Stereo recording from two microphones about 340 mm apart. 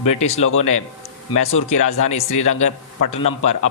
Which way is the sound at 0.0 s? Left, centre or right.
Centre.